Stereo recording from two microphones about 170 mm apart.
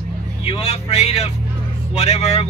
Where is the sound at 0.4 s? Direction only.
35° left (ahead or behind).